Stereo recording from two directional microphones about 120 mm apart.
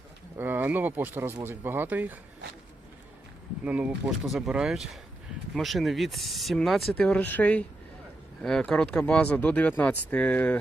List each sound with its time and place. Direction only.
0.3 s speech: 15° right (ahead or behind)
3.6 s speech: 10° right (ahead or behind); by 10.6 s 15° left (ahead or behind)